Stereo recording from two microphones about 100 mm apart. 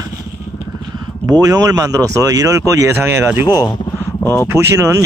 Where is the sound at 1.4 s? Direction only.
30° right (ahead or behind).